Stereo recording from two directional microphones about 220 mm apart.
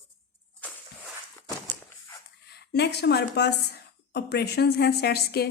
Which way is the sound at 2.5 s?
50° left (ahead or behind).